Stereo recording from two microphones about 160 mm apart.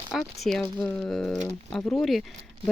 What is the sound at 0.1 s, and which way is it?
Speech, centre (ahead or behind).